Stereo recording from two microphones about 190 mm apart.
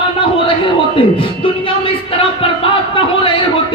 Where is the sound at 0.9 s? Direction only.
30° left (ahead or behind).